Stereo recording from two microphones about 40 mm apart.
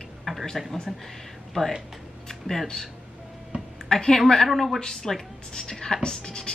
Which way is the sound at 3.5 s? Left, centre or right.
Right.